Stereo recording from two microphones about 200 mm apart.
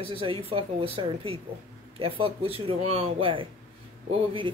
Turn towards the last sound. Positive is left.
turn(degrees=-25)  # may be behind; listen again after turning